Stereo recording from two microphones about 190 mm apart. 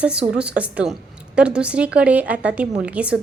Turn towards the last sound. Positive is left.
turn(degrees=-5)  # may be behind; listen again after turning